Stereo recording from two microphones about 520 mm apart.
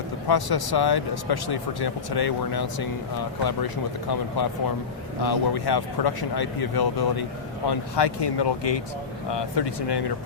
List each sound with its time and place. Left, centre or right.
0.3 s speech: left